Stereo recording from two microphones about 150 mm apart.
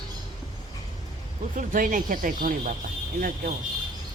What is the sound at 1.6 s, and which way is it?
Speech, 65° right (ahead or behind).